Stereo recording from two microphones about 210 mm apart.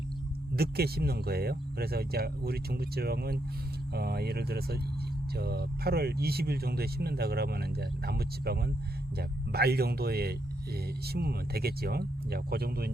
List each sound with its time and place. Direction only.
0.5 s speech: 50° right (ahead or behind)